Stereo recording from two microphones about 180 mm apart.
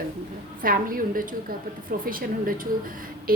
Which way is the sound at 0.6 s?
50° right (ahead or behind).